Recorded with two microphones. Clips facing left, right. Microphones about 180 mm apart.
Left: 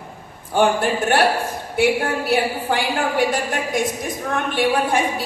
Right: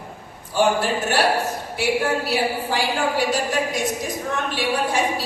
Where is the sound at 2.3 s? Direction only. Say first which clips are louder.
Left 3 dB; 55° left (ahead or behind).